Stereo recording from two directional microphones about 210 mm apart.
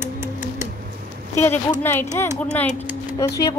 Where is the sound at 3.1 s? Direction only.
15° left (ahead or behind).